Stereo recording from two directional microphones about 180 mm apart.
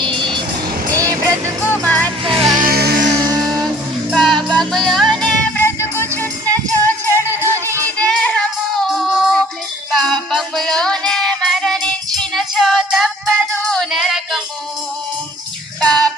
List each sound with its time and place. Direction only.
0.9 s vehicle: 20° right (ahead or behind)
1.6 s music: 10° left (ahead or behind)
2.5 s music: 50° right (ahead or behind)
4.1 s music: 5° left (ahead or behind)
7.3 s music: 10° right (ahead or behind)
7.9 s child singing: 5° left (ahead or behind)
9.9 s music: centre (ahead or behind)
15.8 s child singing: 5° left (ahead or behind)